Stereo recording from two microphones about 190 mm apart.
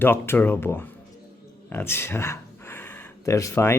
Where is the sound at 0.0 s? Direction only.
10° left (ahead or behind).